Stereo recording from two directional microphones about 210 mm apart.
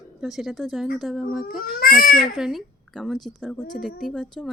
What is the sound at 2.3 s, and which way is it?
Speech, centre (ahead or behind).